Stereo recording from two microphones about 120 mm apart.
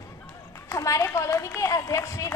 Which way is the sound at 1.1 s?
25° left (ahead or behind).